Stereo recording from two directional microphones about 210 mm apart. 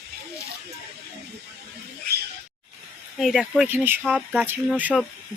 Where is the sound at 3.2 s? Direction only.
Centre (ahead or behind).